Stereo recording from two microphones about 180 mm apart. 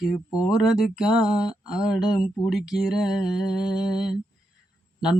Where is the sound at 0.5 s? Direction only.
5° right (ahead or behind).